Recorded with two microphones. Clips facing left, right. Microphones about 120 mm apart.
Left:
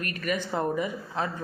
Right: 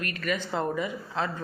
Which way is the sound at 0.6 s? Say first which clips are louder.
Left 1 dB; 15° left (ahead or behind).